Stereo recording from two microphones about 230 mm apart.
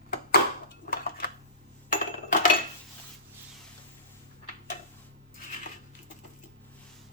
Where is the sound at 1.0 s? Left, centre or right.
Left.